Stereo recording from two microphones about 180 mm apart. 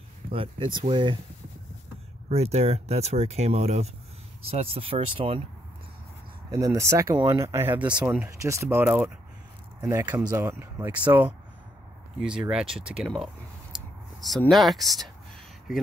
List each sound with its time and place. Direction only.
0.3 s speech: 30° right (ahead or behind)
2.2 s speech: 35° right (ahead or behind)
6.5 s speech: 20° right (ahead or behind); by 13.3 s centre (ahead or behind)
14.5 s speech: centre (ahead or behind)